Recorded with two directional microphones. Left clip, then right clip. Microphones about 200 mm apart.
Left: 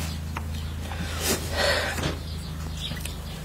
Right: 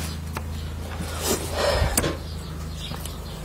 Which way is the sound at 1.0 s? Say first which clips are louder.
Right 2 dB; 55° left (ahead or behind).